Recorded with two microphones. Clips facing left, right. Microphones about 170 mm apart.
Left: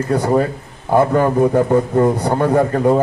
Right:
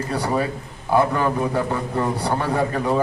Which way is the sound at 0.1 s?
45° left (ahead or behind).